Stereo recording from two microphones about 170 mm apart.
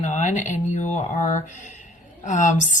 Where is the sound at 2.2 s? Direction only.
45° left (ahead or behind).